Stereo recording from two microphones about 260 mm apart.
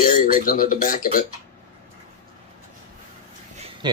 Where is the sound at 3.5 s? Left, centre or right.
Right.